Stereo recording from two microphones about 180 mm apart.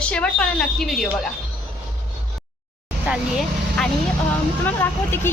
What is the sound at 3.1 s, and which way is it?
Speech, 5° right (ahead or behind).